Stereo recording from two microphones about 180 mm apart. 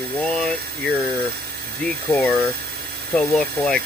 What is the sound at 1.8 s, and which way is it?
Speech, 5° left (ahead or behind).